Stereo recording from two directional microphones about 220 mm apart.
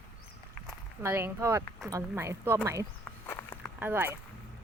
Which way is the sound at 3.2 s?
10° left (ahead or behind).